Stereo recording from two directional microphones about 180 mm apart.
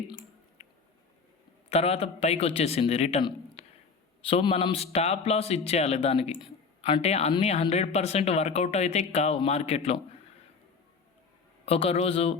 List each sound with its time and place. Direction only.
0.6 s squish: 35° left (ahead or behind)
1.7 s speech: 35° left (ahead or behind)
11.6 s speech: 35° left (ahead or behind)